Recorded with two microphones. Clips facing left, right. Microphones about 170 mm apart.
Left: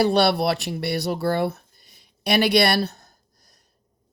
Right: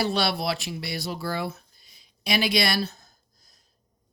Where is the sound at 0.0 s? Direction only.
60° left (ahead or behind).